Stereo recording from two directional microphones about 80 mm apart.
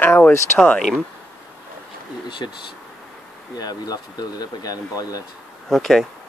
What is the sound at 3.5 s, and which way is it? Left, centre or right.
Speech, left.